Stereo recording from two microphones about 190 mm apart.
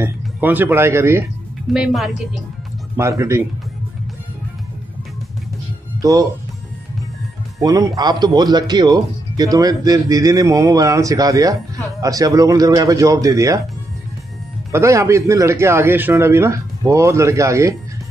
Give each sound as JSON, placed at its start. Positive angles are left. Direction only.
{"t": 0.0, "sound": "speech", "side_deg": -10}
{"t": 1.7, "sound": "a woman's voice", "side_deg": 0}
{"t": 3.0, "sound": "a man's voice", "side_deg": -15}
{"t": 5.9, "sound": "speech", "side_deg": -20}
{"t": 7.6, "sound": "a man's voice", "side_deg": -20}
{"t": 14.7, "sound": "a man's voice", "side_deg": -15}